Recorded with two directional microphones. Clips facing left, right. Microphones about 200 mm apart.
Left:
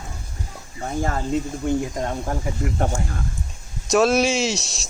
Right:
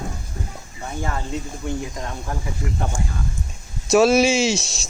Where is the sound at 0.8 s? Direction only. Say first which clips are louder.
Left 4 dB; 40° left (ahead or behind).